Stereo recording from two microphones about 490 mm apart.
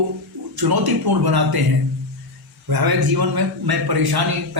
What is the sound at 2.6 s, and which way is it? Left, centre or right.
A man's voice, right.